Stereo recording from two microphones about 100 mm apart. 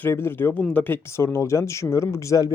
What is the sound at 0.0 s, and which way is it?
Speech, 25° left (ahead or behind).